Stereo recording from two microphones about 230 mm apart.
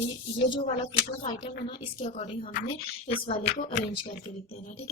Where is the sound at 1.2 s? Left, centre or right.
Left.